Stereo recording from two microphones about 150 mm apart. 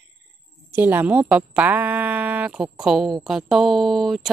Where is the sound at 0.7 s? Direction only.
15° right (ahead or behind).